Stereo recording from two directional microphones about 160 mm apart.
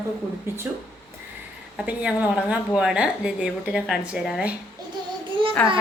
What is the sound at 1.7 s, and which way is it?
Speech, 5° right (ahead or behind).